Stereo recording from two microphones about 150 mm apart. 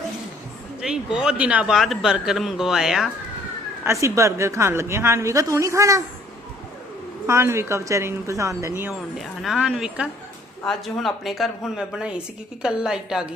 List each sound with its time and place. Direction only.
0.8 s a man's voice: 5° right (ahead or behind)
4.0 s a woman's voice: 20° right (ahead or behind)
7.3 s a woman's voice: 20° right (ahead or behind)
9.1 s a man's voice: centre (ahead or behind)